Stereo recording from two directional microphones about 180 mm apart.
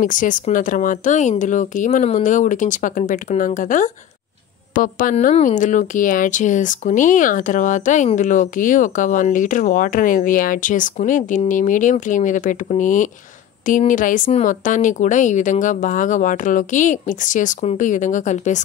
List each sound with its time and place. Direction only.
0.0 s speech: 45° left (ahead or behind)
5.1 s speech: 40° left (ahead or behind)